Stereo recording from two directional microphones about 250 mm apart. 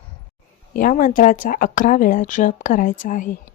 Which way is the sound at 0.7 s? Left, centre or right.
Left.